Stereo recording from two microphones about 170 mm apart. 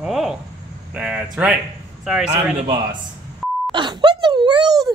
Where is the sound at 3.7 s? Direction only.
25° right (ahead or behind).